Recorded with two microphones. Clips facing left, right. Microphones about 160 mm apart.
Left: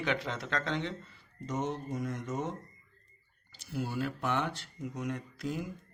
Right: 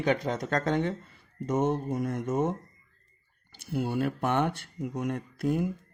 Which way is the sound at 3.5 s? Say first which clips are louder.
Right 6 dB; 55° right (ahead or behind).